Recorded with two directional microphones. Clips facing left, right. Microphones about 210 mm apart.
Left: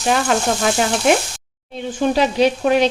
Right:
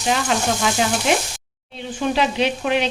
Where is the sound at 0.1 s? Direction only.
50° left (ahead or behind).